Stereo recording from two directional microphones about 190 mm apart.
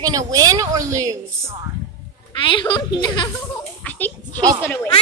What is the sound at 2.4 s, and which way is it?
Speech, 25° left (ahead or behind).